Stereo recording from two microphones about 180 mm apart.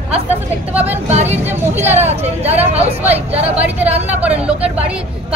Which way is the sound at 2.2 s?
35° right (ahead or behind).